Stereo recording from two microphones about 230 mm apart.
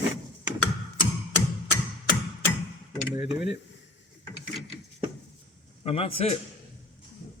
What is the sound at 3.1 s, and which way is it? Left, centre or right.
Speech, centre.